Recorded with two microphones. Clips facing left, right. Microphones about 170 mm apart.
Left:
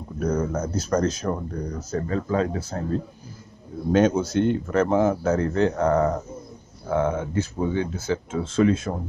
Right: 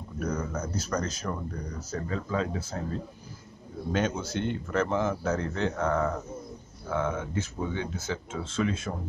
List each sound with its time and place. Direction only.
0.2 s speech: 45° left (ahead or behind)